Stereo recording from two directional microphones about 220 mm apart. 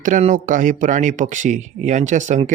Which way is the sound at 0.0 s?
35° right (ahead or behind).